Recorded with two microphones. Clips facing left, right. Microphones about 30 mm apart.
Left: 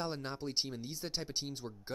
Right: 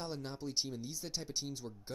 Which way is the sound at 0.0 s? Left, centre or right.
Left.